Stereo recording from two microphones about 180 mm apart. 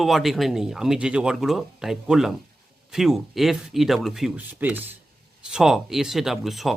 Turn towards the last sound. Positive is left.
turn(degrees=0)  # may be behind; listen again after turning